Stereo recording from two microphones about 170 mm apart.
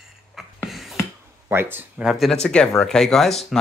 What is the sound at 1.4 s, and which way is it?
Speech, 10° right (ahead or behind).